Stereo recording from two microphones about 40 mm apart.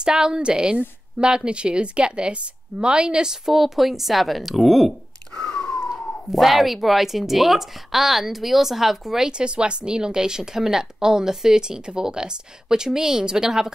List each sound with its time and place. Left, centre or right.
0.0 s a woman's voice: centre
5.4 s biting: left
6.3 s speech: centre
9.3 s a woman's voice: right